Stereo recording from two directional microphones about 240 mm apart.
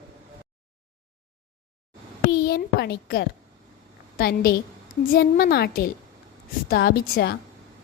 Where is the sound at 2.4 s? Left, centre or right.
Left.